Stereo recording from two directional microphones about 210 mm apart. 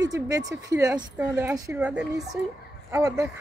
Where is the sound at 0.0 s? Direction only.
15° right (ahead or behind).